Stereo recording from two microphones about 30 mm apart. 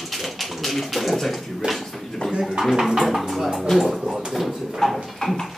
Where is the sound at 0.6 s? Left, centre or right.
Centre.